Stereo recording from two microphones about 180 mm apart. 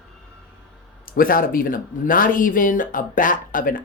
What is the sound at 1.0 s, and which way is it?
Speech, 50° left (ahead or behind).